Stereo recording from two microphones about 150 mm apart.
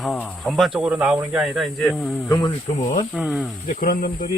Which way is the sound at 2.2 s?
25° left (ahead or behind).